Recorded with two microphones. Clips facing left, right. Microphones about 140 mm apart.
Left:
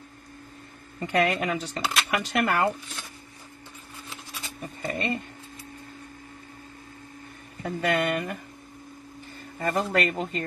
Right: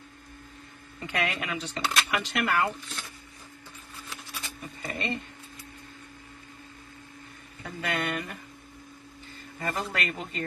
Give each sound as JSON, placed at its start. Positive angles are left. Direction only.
{"t": 0.9, "sound": "speech", "side_deg": 40}
{"t": 4.1, "sound": "a sound", "side_deg": 25}
{"t": 4.6, "sound": "speech", "side_deg": 45}
{"t": 7.6, "sound": "speech", "side_deg": 40}
{"t": 9.6, "sound": "speech", "side_deg": 40}